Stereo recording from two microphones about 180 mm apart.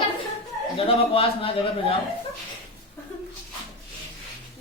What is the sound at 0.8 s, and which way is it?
Speech, 30° left (ahead or behind).